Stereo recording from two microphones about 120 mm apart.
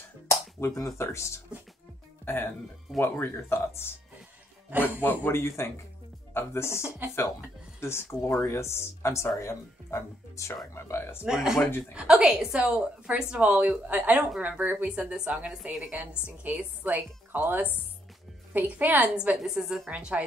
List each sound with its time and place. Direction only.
0.3 s finger snapping: 25° left (ahead or behind)
0.9 s speech: 25° left (ahead or behind)
4.6 s a woman's voice: 15° right (ahead or behind)
5.2 s speech: 20° left (ahead or behind)
7.0 s a woman's voice: 15° right (ahead or behind)
7.8 s speech: 20° left (ahead or behind)
11.2 s a woman's voice: 5° right (ahead or behind)